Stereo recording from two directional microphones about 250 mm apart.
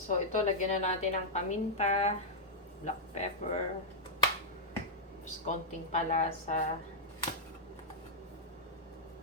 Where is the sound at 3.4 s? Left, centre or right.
Left.